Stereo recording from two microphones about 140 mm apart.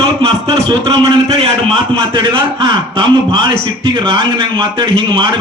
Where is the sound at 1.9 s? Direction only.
40° right (ahead or behind).